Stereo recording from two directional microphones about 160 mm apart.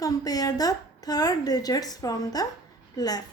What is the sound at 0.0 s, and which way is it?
A woman's voice, 25° left (ahead or behind).